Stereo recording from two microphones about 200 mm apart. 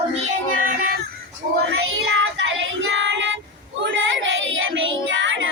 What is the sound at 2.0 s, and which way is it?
Child singing, 65° right (ahead or behind).